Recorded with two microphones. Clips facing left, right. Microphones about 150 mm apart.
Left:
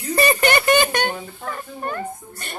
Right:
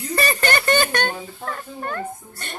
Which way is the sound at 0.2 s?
20° left (ahead or behind).